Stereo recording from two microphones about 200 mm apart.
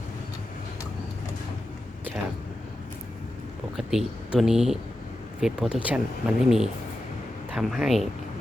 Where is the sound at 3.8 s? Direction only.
Centre (ahead or behind).